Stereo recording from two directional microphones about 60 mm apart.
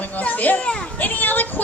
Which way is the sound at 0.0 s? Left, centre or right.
Left.